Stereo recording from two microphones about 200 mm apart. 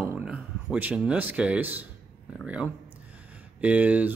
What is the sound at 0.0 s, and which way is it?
Speech, 10° right (ahead or behind).